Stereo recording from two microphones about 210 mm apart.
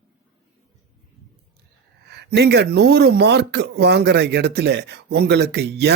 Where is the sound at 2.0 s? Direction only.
50° right (ahead or behind).